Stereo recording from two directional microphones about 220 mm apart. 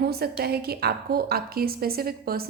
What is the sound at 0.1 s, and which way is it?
A woman's voice, 45° right (ahead or behind).